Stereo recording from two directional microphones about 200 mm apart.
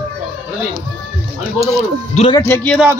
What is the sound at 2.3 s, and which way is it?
Speech, 10° left (ahead or behind).